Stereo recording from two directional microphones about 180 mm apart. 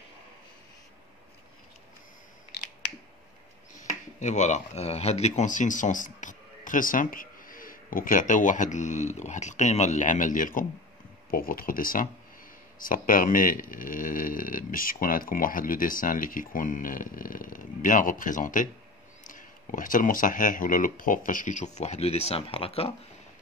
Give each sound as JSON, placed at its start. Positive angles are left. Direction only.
{"t": 3.7, "sound": "speech", "side_deg": 40}